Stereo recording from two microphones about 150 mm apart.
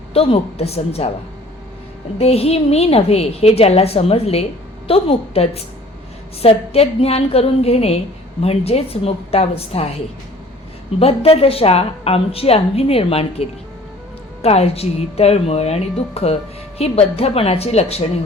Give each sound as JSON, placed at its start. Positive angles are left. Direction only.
{"t": 0.1, "sound": "a woman's voice", "side_deg": 40}
{"t": 2.1, "sound": "a woman's voice", "side_deg": 45}
{"t": 11.0, "sound": "a woman's voice", "side_deg": 40}